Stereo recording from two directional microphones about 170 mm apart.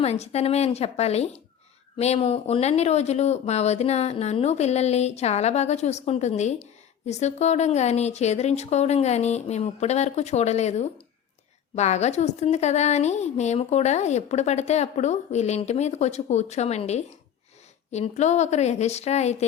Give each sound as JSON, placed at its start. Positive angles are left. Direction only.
{"t": 0.0, "sound": "a woman's voice", "side_deg": 40}